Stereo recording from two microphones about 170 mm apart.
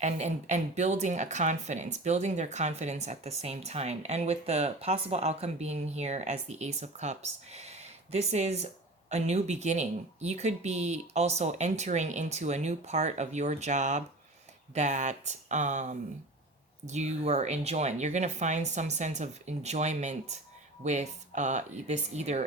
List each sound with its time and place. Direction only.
0.0 s speech: 40° right (ahead or behind)